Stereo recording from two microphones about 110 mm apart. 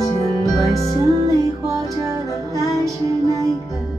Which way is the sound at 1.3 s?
30° right (ahead or behind).